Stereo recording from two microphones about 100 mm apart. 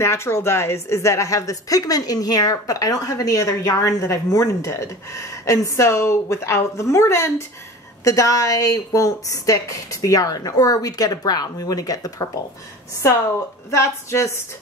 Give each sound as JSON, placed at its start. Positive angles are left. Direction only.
{"t": 0.0, "sound": "a woman's voice", "side_deg": 25}
{"t": 13.7, "sound": "speech", "side_deg": 30}